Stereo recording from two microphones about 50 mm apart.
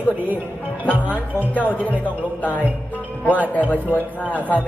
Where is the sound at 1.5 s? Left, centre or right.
Left.